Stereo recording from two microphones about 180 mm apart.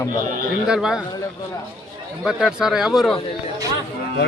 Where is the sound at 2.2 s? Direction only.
5° right (ahead or behind).